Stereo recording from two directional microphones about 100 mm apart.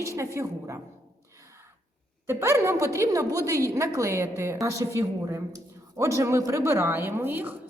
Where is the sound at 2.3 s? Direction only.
25° right (ahead or behind).